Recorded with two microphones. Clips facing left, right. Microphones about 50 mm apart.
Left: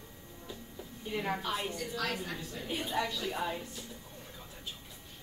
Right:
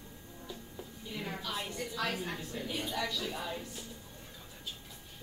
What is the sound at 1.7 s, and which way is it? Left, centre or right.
Speech, right.